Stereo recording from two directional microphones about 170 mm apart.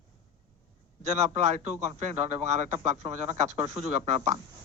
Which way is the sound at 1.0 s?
40° right (ahead or behind).